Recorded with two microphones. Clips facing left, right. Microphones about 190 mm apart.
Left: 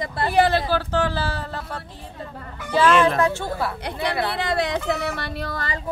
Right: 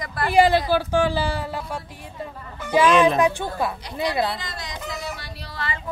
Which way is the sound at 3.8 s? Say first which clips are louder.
Right 1 dB; 60° left (ahead or behind).